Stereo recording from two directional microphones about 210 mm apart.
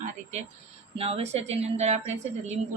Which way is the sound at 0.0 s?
30° right (ahead or behind).